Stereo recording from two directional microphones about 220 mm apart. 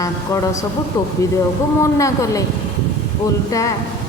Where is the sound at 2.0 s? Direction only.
15° left (ahead or behind).